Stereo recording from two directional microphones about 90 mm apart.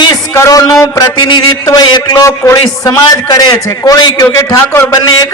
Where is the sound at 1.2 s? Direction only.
55° left (ahead or behind).